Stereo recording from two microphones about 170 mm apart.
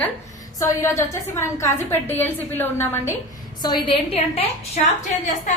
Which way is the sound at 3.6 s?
30° left (ahead or behind).